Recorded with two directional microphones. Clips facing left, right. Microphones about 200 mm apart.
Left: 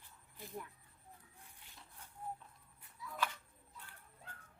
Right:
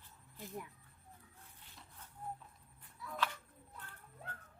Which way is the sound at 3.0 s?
60° right (ahead or behind).